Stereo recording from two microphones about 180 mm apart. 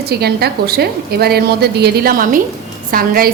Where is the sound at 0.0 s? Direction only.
60° right (ahead or behind).